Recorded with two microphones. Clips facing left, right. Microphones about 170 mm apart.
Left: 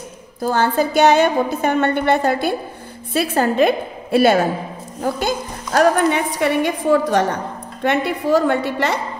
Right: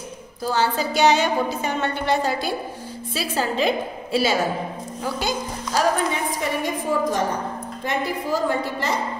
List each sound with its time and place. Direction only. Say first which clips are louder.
0.4 s a woman's voice: left 5 dB; 50° left (ahead or behind); by 9.0 s 70° left (ahead or behind)